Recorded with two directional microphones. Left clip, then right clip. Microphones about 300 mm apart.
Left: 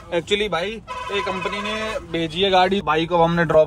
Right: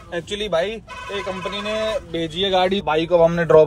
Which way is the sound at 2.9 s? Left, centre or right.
Centre.